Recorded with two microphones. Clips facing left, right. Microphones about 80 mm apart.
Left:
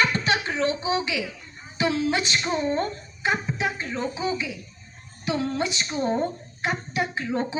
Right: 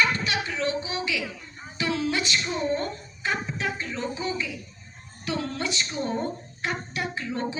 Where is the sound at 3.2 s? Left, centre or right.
Centre.